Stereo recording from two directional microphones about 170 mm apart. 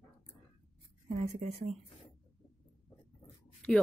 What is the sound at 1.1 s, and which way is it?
Speech, 40° right (ahead or behind).